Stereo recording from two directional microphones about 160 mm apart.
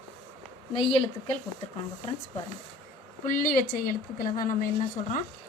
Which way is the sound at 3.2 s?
55° left (ahead or behind).